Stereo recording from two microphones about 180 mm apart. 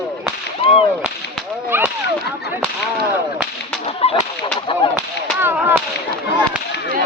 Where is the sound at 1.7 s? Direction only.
10° right (ahead or behind).